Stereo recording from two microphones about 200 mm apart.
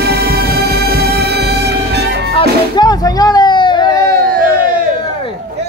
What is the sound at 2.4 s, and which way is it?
Music, 20° left (ahead or behind).